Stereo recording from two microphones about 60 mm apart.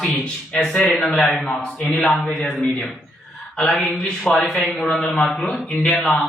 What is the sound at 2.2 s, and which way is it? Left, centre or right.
Speech, centre.